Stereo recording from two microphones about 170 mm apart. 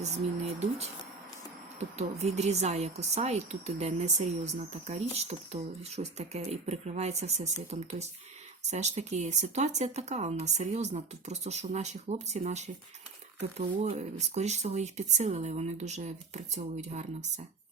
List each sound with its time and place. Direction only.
0.0 s speech: 40° right (ahead or behind)
2.0 s speech: 40° right (ahead or behind)